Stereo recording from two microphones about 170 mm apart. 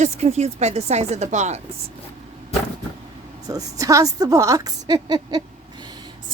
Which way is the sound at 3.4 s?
20° right (ahead or behind).